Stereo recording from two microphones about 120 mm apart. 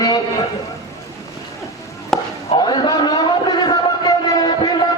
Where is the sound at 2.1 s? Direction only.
5° left (ahead or behind).